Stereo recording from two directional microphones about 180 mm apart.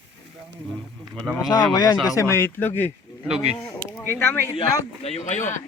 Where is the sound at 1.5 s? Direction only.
20° left (ahead or behind).